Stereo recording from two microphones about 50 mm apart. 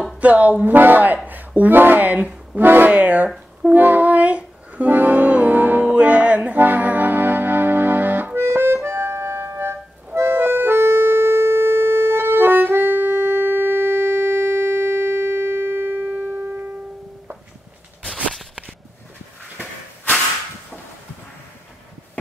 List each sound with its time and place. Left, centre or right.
0.2 s music: right
0.7 s speech: right
3.6 s music: right
8.4 s music: right
18.3 s a sound: centre